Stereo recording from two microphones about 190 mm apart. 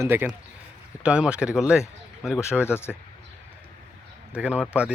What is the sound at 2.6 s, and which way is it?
Speech, 10° left (ahead or behind).